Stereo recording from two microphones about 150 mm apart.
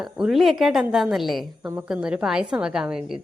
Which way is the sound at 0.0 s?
5° right (ahead or behind).